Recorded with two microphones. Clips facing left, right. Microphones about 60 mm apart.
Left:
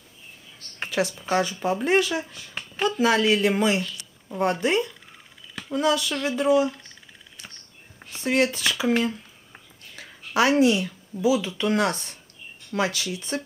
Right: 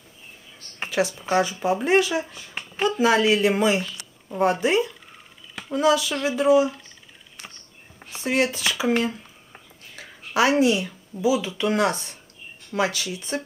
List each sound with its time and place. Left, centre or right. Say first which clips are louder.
0.7 s speech: right 2 dB; centre
3.9 s a sound: right 1 dB; right
4.4 s speech: right 2 dB; centre
8.0 s speech: even; centre